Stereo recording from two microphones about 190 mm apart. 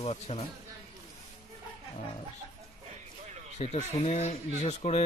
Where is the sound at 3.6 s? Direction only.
30° left (ahead or behind).